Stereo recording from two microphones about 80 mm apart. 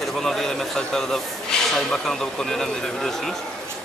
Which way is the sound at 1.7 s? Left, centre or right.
Centre.